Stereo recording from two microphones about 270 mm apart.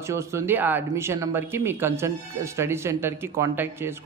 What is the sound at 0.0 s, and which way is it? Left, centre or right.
Speech, centre.